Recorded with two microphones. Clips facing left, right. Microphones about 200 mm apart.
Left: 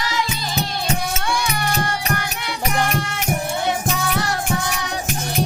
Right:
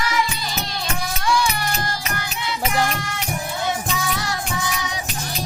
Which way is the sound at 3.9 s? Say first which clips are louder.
Left 3 dB; 60° left (ahead or behind).